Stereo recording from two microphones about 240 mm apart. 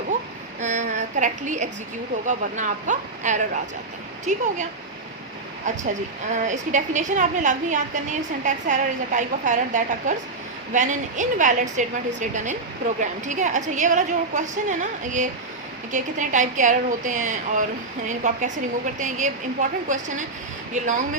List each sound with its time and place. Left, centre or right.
0.6 s a sound: right
2.2 s a woman's voice: right
5.7 s a woman's voice: right